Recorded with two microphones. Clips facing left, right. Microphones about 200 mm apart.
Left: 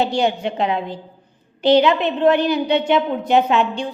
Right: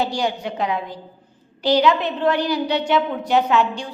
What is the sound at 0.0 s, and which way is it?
A woman's voice, 25° left (ahead or behind).